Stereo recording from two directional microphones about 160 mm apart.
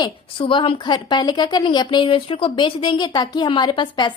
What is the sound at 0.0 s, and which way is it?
A woman's voice, 30° left (ahead or behind).